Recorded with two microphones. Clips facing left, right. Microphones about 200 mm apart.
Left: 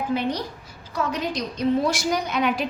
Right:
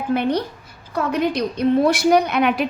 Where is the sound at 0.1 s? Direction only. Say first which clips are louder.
Right 9 dB; 60° right (ahead or behind).